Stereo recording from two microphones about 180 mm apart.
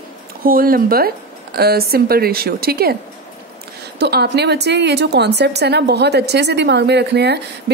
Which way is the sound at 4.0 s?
65° right (ahead or behind).